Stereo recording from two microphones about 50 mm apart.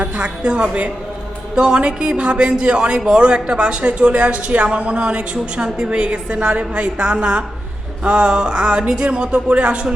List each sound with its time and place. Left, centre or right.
0.0 s a man's voice: right